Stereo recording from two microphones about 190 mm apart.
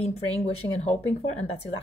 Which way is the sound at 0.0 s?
30° left (ahead or behind).